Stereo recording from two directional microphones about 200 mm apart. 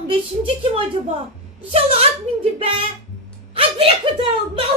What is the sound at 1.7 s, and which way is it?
Music, 30° right (ahead or behind).